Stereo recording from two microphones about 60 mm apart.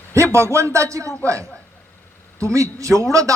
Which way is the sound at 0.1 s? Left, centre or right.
Right.